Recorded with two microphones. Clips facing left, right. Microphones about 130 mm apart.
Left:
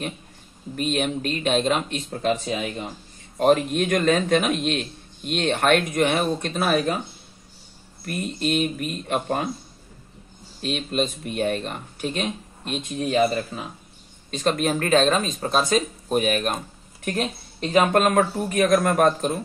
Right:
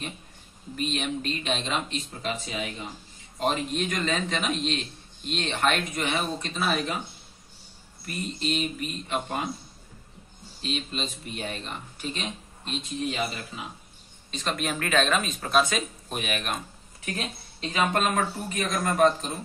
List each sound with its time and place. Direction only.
0.7 s a man's voice: 50° left (ahead or behind)
3.3 s a man's voice: 55° left (ahead or behind)
8.0 s a man's voice: 50° left (ahead or behind)
10.6 s a man's voice: 50° left (ahead or behind)